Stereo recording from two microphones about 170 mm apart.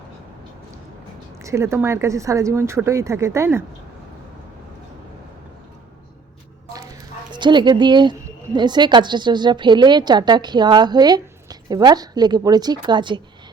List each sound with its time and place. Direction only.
1.5 s speech: 15° right (ahead or behind)
7.3 s a woman's voice: 25° right (ahead or behind)